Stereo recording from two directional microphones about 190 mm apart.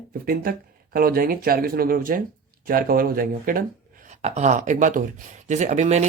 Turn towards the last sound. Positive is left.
turn(degrees=-40)  # may be behind; listen again after turning